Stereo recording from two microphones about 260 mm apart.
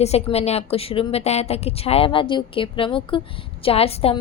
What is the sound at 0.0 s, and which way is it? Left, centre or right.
A woman's voice, left.